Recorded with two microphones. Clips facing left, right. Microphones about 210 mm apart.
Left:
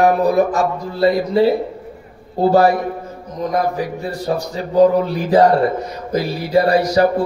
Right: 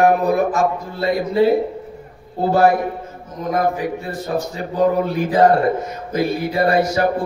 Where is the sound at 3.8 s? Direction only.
35° left (ahead or behind).